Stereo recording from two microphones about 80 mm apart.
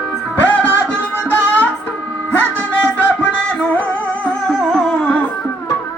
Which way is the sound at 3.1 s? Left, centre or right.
Centre.